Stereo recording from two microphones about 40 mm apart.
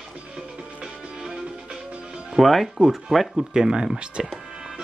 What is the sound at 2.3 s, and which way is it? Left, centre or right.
Speech, centre.